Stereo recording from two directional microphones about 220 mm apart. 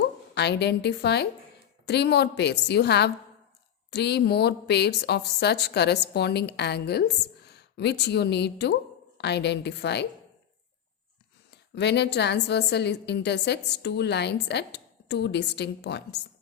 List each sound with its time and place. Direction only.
0.3 s a woman's voice: 50° left (ahead or behind)
11.5 s a woman's voice: 50° left (ahead or behind)